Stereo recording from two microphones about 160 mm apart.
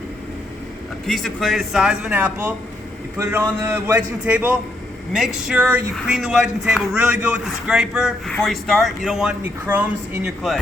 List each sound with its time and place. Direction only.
1.0 s a man's voice: centre (ahead or behind)